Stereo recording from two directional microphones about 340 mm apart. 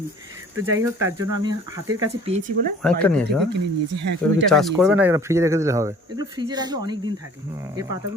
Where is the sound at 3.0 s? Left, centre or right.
Centre.